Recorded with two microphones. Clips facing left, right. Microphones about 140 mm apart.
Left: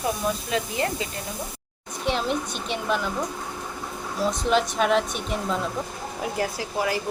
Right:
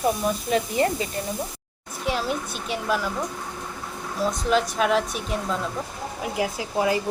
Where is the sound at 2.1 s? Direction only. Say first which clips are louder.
Left 1 dB; 5° right (ahead or behind).